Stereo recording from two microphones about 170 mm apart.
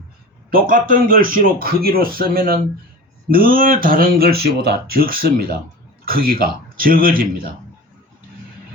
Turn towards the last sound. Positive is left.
turn(degrees=-60)  # may be behind; listen again after turning